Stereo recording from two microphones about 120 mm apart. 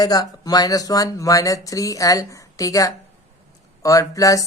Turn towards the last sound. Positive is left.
turn(degrees=30)  # may be behind; listen again after turning